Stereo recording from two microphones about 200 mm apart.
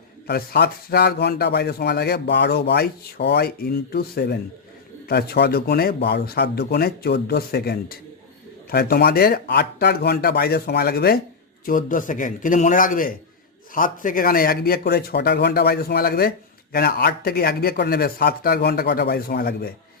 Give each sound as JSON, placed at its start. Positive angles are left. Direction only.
{"t": 0.3, "sound": "a man's voice", "side_deg": 50}